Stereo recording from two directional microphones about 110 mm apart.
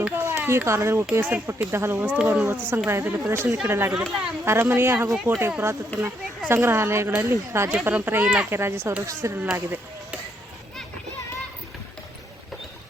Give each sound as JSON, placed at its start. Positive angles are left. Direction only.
{"t": 0.0, "sound": "a sound", "side_deg": -20}
{"t": 1.1, "sound": "speech", "side_deg": -20}
{"t": 3.9, "sound": "speech", "side_deg": -5}
{"t": 4.4, "sound": "a child's voice", "side_deg": -25}
{"t": 8.4, "sound": "speech", "side_deg": -20}